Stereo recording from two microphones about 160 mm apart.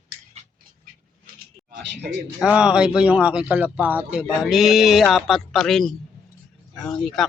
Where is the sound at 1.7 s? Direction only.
90° right.